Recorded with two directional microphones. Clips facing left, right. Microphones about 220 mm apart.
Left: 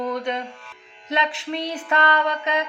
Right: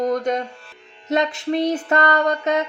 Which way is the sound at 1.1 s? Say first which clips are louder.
Right 6 dB; 45° right (ahead or behind).